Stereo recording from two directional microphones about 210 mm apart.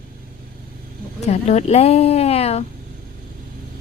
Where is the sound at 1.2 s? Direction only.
30° left (ahead or behind).